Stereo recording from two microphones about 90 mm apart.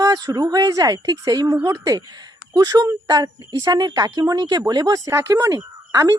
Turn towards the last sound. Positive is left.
turn(degrees=-40)  # may be behind; listen again after turning